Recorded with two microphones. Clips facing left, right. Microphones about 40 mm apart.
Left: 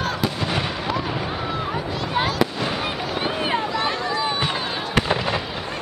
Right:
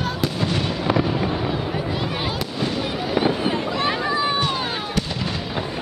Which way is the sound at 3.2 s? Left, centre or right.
Left.